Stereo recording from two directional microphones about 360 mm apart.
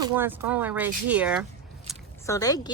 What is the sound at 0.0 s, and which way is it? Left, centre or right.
Speech, centre.